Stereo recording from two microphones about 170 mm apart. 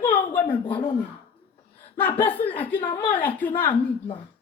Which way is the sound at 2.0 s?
10° left (ahead or behind).